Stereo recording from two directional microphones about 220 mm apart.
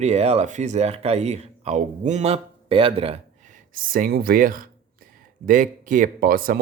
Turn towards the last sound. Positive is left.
turn(degrees=-40)  # may be behind; listen again after turning